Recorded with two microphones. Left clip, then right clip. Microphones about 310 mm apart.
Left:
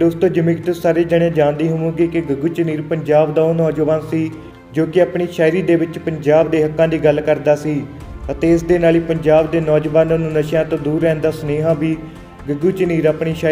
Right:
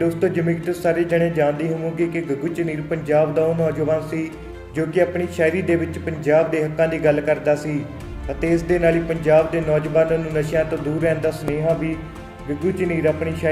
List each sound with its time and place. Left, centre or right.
0.0 s speech: left